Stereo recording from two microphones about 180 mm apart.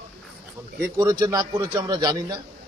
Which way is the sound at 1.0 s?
20° right (ahead or behind).